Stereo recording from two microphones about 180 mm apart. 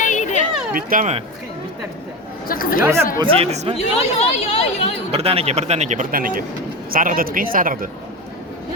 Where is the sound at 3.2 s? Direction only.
30° right (ahead or behind).